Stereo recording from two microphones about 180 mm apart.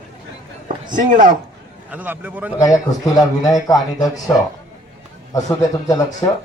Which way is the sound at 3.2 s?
20° left (ahead or behind).